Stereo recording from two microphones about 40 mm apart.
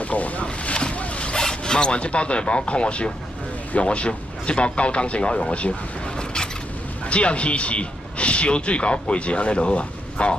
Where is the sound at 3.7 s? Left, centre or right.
Left.